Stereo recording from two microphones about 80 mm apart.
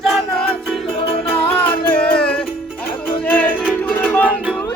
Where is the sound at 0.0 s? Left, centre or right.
Centre.